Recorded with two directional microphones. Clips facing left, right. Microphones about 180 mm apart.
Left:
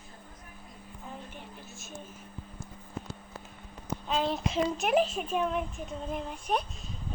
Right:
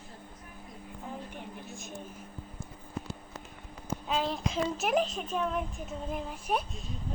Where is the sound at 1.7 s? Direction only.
15° right (ahead or behind).